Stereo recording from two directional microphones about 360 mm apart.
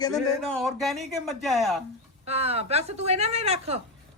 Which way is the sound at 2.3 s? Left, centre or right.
Centre.